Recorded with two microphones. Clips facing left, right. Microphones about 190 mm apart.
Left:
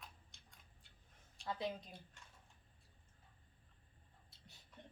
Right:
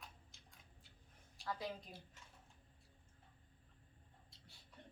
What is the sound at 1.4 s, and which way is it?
Speech, 25° left (ahead or behind).